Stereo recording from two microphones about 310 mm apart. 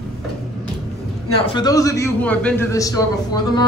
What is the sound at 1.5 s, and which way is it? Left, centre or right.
A man's voice, centre.